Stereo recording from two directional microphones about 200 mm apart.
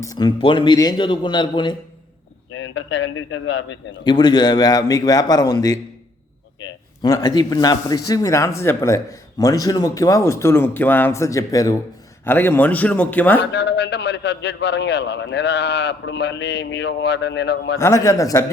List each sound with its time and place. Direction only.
0.0 s a man's voice: 20° left (ahead or behind)
2.5 s a man's voice: 75° left (ahead or behind)
4.0 s a man's voice: 20° left (ahead or behind)
7.0 s a man's voice: 20° left (ahead or behind)
13.5 s a man's voice: 60° left (ahead or behind)
17.7 s a man's voice: 15° left (ahead or behind)